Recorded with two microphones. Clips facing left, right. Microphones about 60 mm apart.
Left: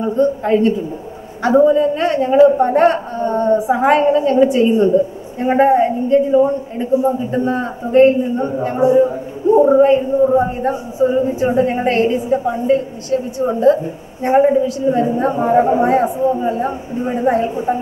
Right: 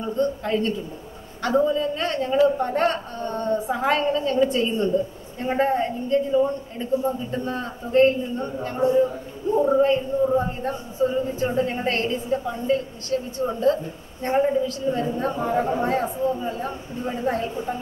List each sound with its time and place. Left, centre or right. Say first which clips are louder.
0.1 s a woman's voice: left 8 dB; centre